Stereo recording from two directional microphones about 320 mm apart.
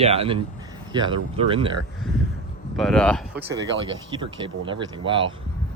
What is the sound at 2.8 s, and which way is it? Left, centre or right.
Speech, centre.